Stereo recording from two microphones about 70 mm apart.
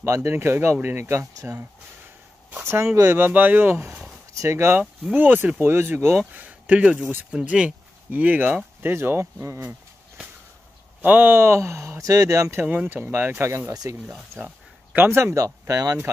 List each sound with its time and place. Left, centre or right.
0.0 s speech: right
1.3 s speech: right
2.5 s speech: right
4.4 s speech: right
5.1 s speech: right
6.3 s speech: right
11.0 s speech: right
12.6 s speech: right
14.4 s a sound: right
15.0 s speech: right
15.6 s speech: right